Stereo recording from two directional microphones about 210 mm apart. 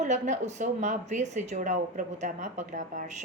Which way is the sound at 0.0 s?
35° right (ahead or behind).